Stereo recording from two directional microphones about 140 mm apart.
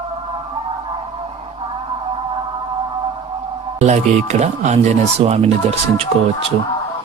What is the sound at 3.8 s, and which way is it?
Speech, 55° right (ahead or behind).